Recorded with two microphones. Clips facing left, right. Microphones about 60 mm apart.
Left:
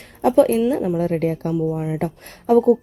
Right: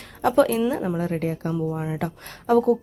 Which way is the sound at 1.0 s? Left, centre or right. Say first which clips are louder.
Left 5 dB; left.